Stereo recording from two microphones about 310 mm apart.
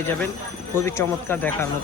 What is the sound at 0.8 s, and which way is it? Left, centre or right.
Speech, centre.